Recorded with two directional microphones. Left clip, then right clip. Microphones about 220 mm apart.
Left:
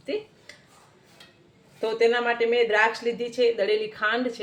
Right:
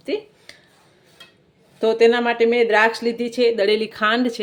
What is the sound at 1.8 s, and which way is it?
Speech, 50° right (ahead or behind).